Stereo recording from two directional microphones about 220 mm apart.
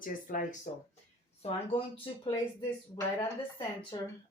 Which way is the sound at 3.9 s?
20° left (ahead or behind).